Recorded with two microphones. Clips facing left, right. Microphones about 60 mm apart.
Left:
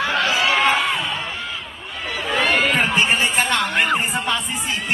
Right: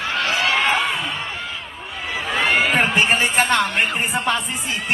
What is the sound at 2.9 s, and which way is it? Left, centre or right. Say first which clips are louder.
Music: right 1 dB; right.